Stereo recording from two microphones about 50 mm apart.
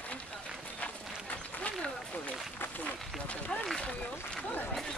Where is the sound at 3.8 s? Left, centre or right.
Left.